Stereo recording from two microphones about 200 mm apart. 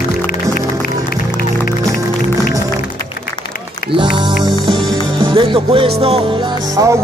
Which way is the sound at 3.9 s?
25° right (ahead or behind).